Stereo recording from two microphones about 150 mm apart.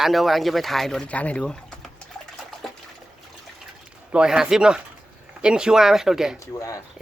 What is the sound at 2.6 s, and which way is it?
Water, centre (ahead or behind).